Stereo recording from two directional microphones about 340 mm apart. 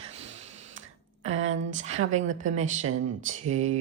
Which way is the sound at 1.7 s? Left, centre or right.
Centre.